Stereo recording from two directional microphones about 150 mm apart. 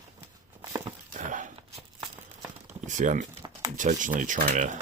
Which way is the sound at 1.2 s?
55° right (ahead or behind).